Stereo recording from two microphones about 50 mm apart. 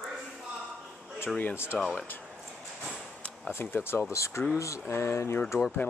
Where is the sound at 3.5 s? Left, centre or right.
Left.